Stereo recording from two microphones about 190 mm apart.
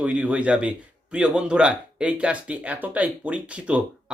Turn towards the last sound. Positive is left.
turn(degrees=-5)  # may be behind; listen again after turning